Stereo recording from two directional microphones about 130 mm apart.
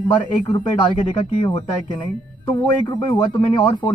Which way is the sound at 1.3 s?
45° left (ahead or behind).